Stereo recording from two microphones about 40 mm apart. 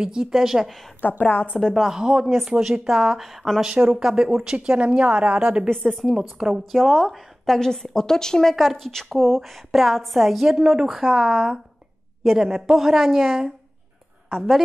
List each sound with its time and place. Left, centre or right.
0.0 s a woman's voice: centre
0.7 s a woman's voice: centre
1.0 s a woman's voice: left
1.6 s a woman's voice: centre
1.9 s a woman's voice: centre
2.8 s a woman's voice: centre
3.8 s a woman's voice: centre
4.6 s a woman's voice: right
5.9 s a woman's voice: centre